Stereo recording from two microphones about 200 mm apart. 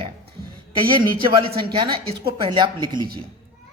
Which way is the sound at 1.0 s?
25° right (ahead or behind).